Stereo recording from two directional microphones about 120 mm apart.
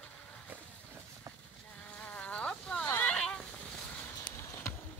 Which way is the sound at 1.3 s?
25° right (ahead or behind).